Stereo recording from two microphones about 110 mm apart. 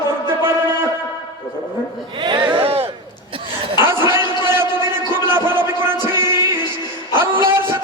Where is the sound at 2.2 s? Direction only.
50° right (ahead or behind).